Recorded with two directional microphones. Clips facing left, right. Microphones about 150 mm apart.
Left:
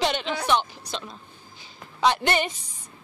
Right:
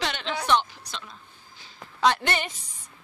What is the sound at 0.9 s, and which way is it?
Speech, 20° left (ahead or behind).